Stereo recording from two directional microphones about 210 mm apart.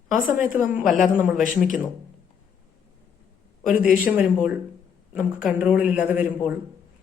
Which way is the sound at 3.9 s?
5° right (ahead or behind).